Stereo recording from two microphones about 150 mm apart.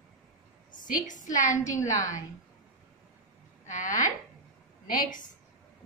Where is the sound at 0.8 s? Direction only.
60° left (ahead or behind).